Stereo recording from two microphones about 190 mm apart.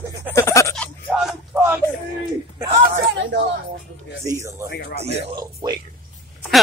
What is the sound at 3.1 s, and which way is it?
Speech, 70° right (ahead or behind).